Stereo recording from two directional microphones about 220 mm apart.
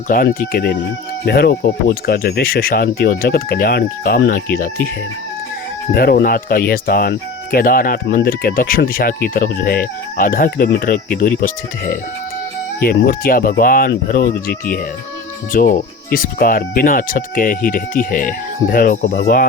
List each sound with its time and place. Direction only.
0.1 s speech: 40° left (ahead or behind)
5.9 s speech: 45° left (ahead or behind)